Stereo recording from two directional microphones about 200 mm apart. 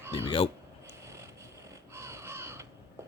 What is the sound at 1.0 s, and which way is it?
Vehicle, 15° right (ahead or behind).